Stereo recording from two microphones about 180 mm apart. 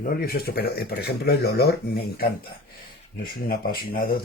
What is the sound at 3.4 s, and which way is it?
Speech, 55° left (ahead or behind).